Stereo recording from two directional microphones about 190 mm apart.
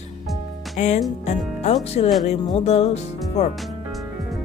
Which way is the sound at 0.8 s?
40° left (ahead or behind).